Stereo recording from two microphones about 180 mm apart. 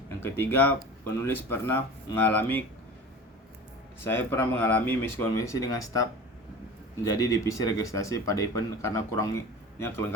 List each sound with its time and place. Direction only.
0.2 s speech: 10° left (ahead or behind)
4.0 s speech: 10° left (ahead or behind)
7.4 s speech: 15° left (ahead or behind)